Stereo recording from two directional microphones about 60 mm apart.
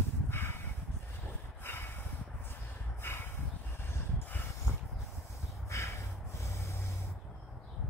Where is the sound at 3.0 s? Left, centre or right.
Left.